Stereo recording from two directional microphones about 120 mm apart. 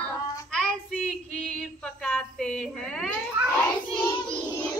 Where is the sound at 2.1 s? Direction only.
5° left (ahead or behind).